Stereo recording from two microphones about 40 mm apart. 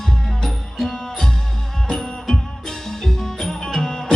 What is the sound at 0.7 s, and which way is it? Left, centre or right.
Music, centre.